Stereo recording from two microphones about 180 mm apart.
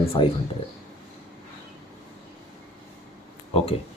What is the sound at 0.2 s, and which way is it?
Speech, 30° left (ahead or behind).